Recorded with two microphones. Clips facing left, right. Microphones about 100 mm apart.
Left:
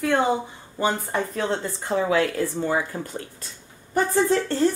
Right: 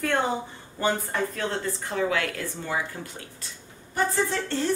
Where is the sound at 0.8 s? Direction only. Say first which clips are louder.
Left 2 dB; 20° left (ahead or behind).